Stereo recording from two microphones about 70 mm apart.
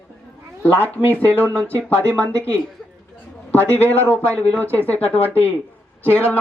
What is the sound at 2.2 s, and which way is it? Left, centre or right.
Speech, left.